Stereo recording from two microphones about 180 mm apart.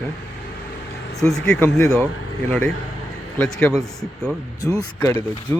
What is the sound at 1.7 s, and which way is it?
Speech, 20° left (ahead or behind).